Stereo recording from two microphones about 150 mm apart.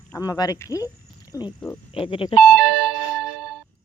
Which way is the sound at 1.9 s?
35° left (ahead or behind).